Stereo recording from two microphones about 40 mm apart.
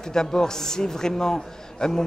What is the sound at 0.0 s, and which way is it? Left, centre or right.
A man's voice, centre.